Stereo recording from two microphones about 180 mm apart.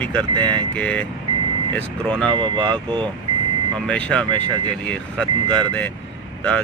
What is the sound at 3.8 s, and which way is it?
Speech, 5° left (ahead or behind).